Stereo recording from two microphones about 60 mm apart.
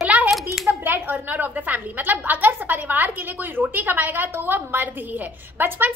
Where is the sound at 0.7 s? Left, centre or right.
Right.